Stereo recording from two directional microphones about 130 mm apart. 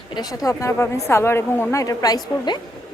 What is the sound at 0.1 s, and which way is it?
A woman's voice, 30° left (ahead or behind).